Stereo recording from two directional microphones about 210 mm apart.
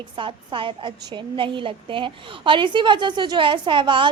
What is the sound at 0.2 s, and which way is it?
A woman's voice, 25° right (ahead or behind).